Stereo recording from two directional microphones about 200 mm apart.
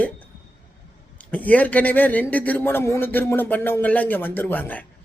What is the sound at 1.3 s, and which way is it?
A man's voice, 10° left (ahead or behind).